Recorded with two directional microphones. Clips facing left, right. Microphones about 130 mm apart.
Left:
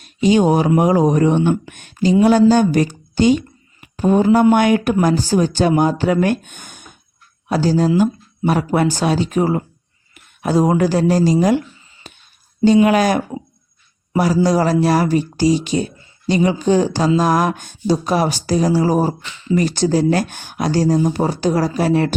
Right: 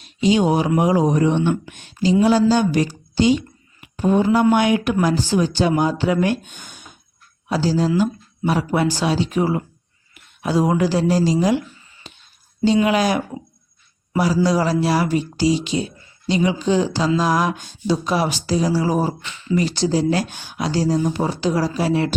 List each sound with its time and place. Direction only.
0.0 s speech: 50° left (ahead or behind)
12.1 s a sound: 50° left (ahead or behind)
12.8 s speech: 50° left (ahead or behind)
14.4 s speech: 45° left (ahead or behind)